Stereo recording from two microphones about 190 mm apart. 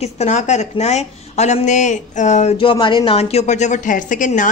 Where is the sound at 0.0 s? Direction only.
35° left (ahead or behind).